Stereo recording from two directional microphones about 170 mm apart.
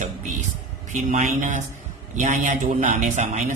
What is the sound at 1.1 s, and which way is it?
A man's voice, 45° right (ahead or behind).